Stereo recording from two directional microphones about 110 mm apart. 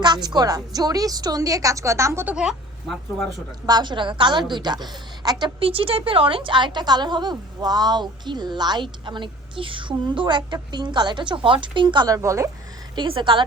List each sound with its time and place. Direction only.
0.0 s a woman's voice: 40° right (ahead or behind)
2.2 s speech: 5° right (ahead or behind)
3.7 s a woman's voice: 40° right (ahead or behind)
5.5 s a woman's voice: 55° right (ahead or behind)
12.0 s speech: 30° right (ahead or behind)
13.0 s a woman's voice: 50° right (ahead or behind)